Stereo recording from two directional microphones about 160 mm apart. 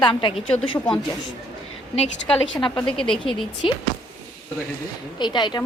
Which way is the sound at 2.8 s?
5° left (ahead or behind).